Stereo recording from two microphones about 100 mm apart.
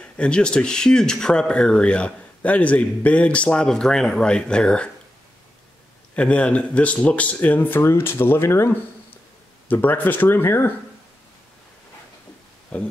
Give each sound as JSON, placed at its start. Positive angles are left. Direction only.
{"t": 0.0, "sound": "speech", "side_deg": 10}
{"t": 6.1, "sound": "speech", "side_deg": 10}
{"t": 12.7, "sound": "speech", "side_deg": 10}